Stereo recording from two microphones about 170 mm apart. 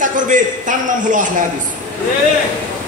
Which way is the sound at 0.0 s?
50° right (ahead or behind).